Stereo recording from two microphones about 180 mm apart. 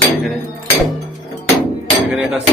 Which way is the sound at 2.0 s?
10° right (ahead or behind).